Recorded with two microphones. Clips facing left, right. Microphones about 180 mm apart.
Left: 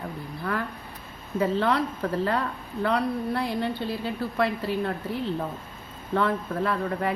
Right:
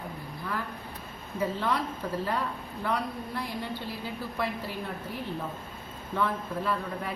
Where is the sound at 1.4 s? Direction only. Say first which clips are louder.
Left 5 dB; 70° left (ahead or behind).